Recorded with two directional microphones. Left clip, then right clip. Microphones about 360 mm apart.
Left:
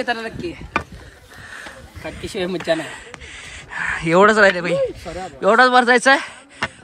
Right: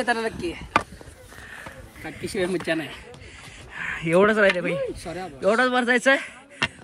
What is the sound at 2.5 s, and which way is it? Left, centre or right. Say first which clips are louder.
Speech: left 5 dB; centre.